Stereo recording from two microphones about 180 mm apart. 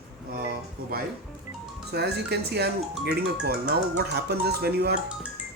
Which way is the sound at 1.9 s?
65° right (ahead or behind).